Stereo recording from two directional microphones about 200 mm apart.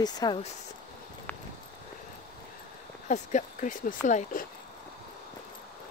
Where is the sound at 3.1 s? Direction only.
40° left (ahead or behind).